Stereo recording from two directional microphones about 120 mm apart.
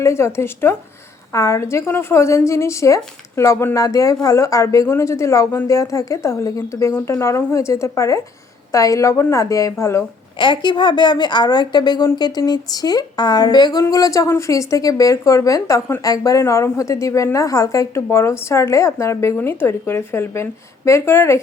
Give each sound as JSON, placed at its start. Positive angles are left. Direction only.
{"t": 0.0, "sound": "a woman's voice", "side_deg": 20}
{"t": 10.3, "sound": "a woman's voice", "side_deg": 40}